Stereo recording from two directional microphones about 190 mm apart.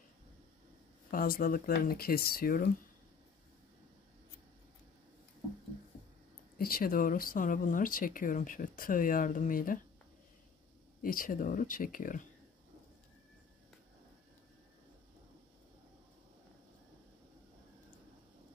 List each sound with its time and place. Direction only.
1.1 s speech: 50° left (ahead or behind)
6.6 s speech: 50° left (ahead or behind)
11.0 s speech: 50° left (ahead or behind)